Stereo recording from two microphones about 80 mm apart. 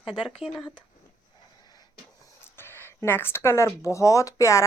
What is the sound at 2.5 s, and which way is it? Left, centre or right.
Speech, left.